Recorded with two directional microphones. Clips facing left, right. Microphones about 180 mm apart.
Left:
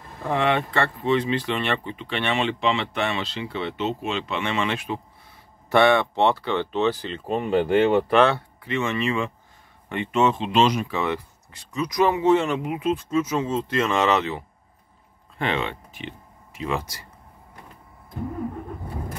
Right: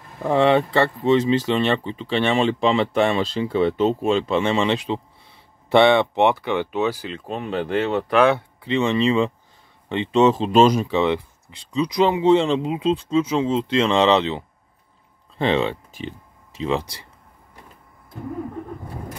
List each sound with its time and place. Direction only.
0.6 s speech: 35° right (ahead or behind); by 8.2 s 5° left (ahead or behind)
8.2 s speech: 20° right (ahead or behind); by 10.8 s 40° right (ahead or behind)
10.8 s speech: 20° right (ahead or behind)